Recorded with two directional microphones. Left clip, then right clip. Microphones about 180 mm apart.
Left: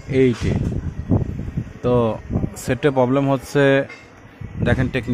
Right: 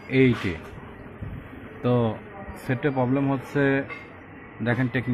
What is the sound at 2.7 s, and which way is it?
Speech, 45° left (ahead or behind).